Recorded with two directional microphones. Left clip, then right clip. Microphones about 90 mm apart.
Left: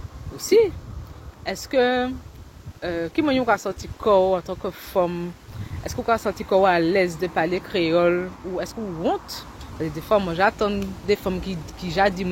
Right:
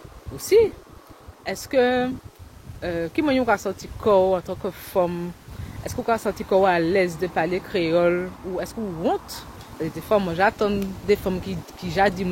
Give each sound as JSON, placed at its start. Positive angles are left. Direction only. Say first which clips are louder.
{"t": 0.4, "sound": "speech", "louder": "even", "side_deg": -35}
{"t": 1.4, "sound": "speech", "louder": "even", "side_deg": -50}
{"t": 8.6, "sound": "speech", "louder": "even", "side_deg": -55}
{"t": 9.8, "sound": "speech", "louder": "left 1 dB", "side_deg": -45}